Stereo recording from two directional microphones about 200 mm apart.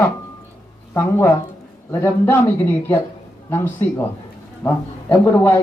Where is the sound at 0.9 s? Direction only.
15° left (ahead or behind).